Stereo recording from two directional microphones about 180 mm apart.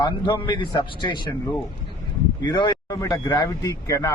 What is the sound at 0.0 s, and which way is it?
A man's voice, 25° left (ahead or behind).